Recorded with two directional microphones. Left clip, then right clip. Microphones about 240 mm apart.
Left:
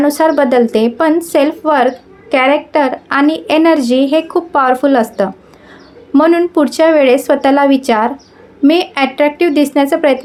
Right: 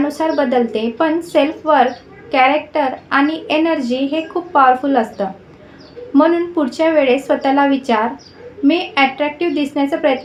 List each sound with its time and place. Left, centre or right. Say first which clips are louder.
0.0 s a woman's voice: left 6 dB; left